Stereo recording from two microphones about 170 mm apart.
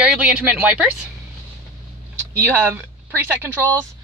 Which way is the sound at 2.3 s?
15° right (ahead or behind).